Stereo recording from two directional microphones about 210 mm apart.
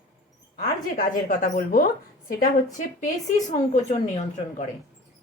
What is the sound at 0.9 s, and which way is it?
A woman's voice, 45° left (ahead or behind).